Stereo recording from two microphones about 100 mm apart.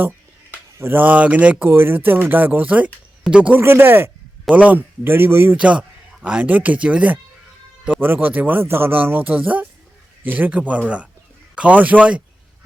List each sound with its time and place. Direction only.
0.7 s speech: 25° right (ahead or behind)
3.6 s speech: 25° right (ahead or behind)
5.5 s speech: 10° right (ahead or behind)